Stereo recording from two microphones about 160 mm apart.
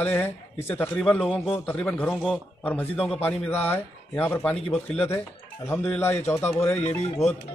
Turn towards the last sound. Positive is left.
turn(degrees=45)  # may be behind; listen again after turning